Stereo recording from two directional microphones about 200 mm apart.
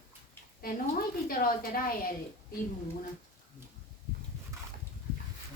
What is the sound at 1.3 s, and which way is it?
Speech, 45° left (ahead or behind).